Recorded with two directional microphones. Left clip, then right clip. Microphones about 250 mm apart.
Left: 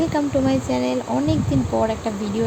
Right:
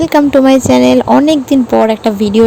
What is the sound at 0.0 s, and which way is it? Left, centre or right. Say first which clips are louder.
Speech: right 12 dB; right.